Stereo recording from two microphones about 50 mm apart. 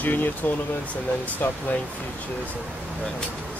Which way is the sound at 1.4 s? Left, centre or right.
Left.